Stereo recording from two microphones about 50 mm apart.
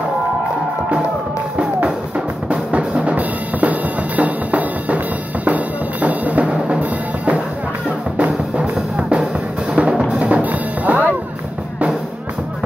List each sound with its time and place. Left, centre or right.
2.7 s drum: right
4.2 s music: right
8.9 s drum kit: right
10.1 s music: right